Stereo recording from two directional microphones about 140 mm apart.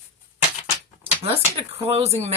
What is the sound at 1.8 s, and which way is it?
Speech, 45° right (ahead or behind).